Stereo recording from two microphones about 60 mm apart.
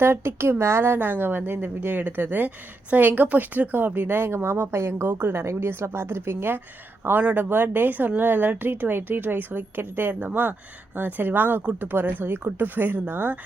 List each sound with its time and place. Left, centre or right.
0.0 s a woman's voice: right
7.2 s a woman's voice: right